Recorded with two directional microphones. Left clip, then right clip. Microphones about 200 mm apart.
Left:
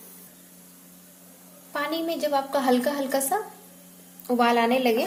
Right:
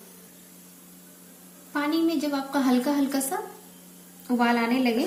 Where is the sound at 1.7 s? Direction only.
45° left (ahead or behind).